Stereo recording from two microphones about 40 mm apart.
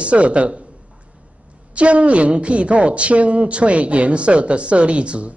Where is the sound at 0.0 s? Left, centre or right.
Right.